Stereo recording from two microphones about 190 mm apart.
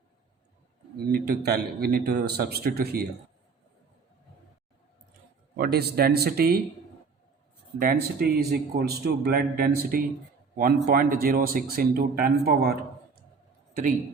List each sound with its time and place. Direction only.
0.9 s speech: 55° right (ahead or behind)
5.5 s speech: 55° right (ahead or behind)
7.8 s a man's voice: 55° right (ahead or behind)